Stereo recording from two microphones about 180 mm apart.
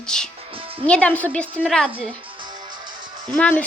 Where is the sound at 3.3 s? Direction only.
10° left (ahead or behind).